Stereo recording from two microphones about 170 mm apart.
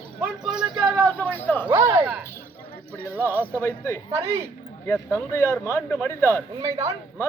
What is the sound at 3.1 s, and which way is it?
Speech, 10° right (ahead or behind).